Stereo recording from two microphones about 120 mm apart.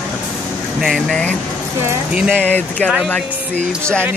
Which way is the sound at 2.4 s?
10° left (ahead or behind).